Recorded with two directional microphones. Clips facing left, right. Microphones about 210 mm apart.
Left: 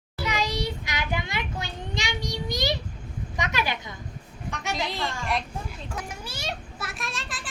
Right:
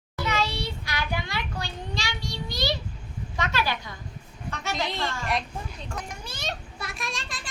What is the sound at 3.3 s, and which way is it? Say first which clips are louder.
Speech: right 1 dB; 15° left (ahead or behind).